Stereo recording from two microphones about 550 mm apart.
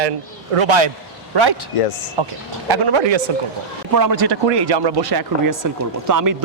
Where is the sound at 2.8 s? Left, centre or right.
Right.